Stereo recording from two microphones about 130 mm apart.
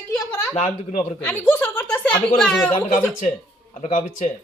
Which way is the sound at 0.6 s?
70° left (ahead or behind).